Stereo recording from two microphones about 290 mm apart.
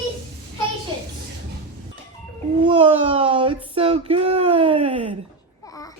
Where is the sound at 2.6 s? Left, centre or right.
Centre.